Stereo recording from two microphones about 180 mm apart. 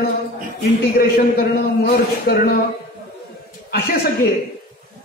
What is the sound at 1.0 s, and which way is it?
A man's voice, 55° left (ahead or behind).